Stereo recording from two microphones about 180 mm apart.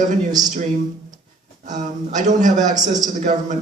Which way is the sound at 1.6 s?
45° right (ahead or behind).